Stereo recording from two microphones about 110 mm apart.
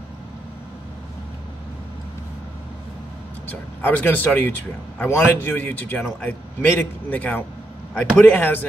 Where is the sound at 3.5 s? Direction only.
15° left (ahead or behind).